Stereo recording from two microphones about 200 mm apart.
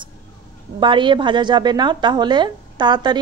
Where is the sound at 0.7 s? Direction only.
25° right (ahead or behind).